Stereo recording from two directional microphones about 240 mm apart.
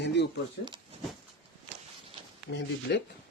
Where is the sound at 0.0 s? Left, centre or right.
Left.